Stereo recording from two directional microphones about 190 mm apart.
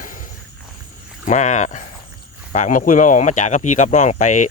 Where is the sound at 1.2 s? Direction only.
40° left (ahead or behind).